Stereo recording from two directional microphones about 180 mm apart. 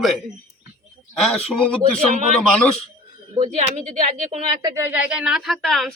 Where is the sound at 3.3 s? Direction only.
35° right (ahead or behind).